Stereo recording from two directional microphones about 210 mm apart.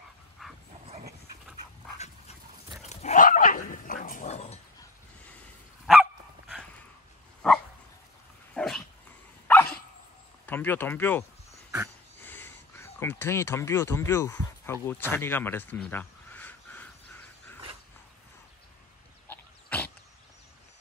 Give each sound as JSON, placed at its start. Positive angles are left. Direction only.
{"t": 0.4, "sound": "dog", "side_deg": 0}
{"t": 2.8, "sound": "dog", "side_deg": 30}
{"t": 5.9, "sound": "dog", "side_deg": 0}
{"t": 7.4, "sound": "dog", "side_deg": 5}
{"t": 10.4, "sound": "speech", "side_deg": 10}
{"t": 12.3, "sound": "speech", "side_deg": 10}
{"t": 19.2, "sound": "pig", "side_deg": 10}